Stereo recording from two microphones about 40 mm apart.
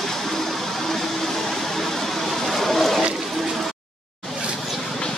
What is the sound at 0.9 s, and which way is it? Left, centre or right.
Vehicle, centre.